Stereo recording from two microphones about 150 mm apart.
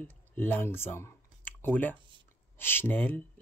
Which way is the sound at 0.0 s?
10° left (ahead or behind).